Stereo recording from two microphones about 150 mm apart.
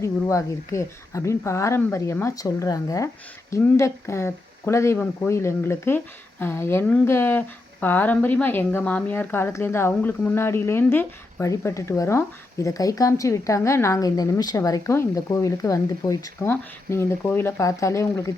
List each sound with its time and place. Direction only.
0.0 s speech: 20° left (ahead or behind)